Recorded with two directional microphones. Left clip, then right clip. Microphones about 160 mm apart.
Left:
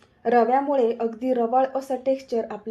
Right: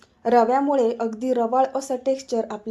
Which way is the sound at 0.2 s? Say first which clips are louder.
Right 1 dB; 30° right (ahead or behind).